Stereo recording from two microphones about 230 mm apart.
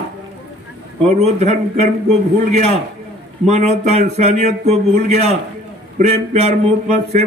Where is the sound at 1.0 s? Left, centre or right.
Right.